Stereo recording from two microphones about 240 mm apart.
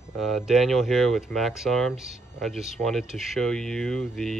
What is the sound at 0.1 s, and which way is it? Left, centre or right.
Speech, centre.